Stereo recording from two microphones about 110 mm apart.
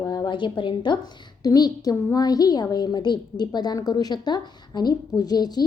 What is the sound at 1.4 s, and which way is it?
A woman's voice, 35° left (ahead or behind).